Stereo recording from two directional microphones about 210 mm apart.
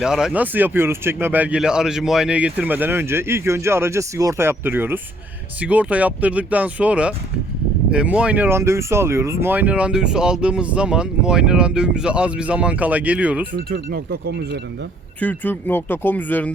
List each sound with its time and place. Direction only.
0.0 s speech: centre (ahead or behind)
13.7 s speech: 45° right (ahead or behind)
15.2 s speech: 10° left (ahead or behind)